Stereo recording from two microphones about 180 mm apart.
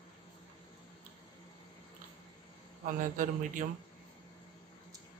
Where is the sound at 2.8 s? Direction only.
45° right (ahead or behind).